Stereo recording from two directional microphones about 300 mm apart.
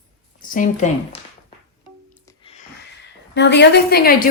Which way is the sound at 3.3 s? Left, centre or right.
Left.